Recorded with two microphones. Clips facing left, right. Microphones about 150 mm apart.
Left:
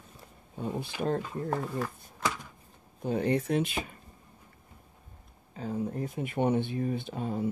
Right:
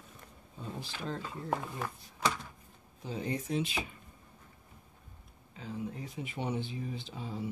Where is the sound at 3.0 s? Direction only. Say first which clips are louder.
Left 9 dB; 60° left (ahead or behind).